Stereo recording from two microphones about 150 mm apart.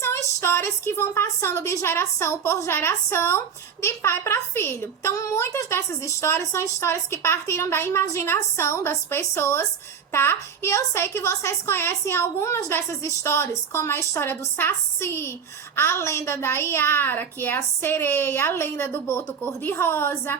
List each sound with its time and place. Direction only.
0.0 s a woman's voice: 20° left (ahead or behind)